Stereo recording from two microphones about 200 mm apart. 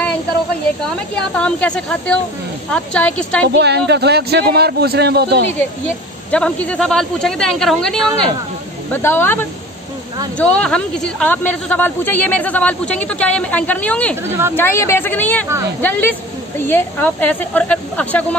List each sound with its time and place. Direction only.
1.3 s speech: 5° left (ahead or behind)
3.4 s a man's voice: 55° right (ahead or behind)
6.3 s speech: 5° left (ahead or behind)